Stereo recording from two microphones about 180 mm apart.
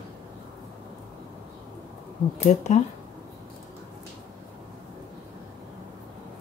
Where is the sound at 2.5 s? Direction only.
40° left (ahead or behind).